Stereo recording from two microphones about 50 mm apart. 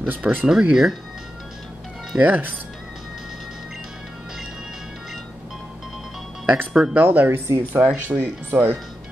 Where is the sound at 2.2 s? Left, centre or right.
Right.